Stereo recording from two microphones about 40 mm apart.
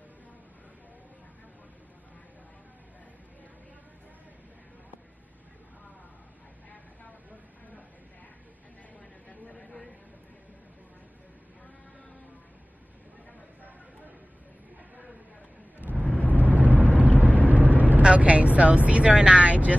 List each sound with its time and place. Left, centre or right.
9.3 s a sound: left
16.1 s vehicle: left
16.5 s vehicle: right
18.0 s speech: right